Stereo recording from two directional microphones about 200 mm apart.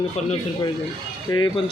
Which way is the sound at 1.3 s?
20° left (ahead or behind).